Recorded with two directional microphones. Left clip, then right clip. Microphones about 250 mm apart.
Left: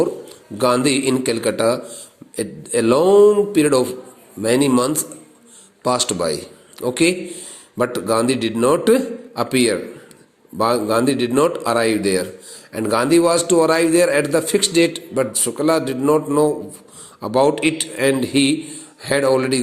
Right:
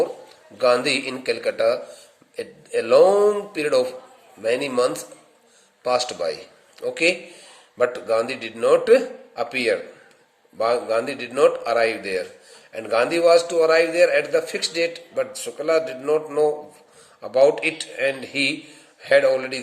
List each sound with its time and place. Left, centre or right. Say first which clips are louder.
0.6 s a man's voice: left 2 dB; centre